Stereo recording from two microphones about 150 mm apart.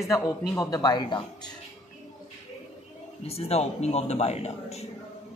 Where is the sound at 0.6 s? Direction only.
25° left (ahead or behind).